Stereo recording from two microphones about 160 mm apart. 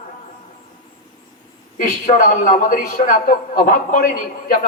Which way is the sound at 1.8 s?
55° left (ahead or behind).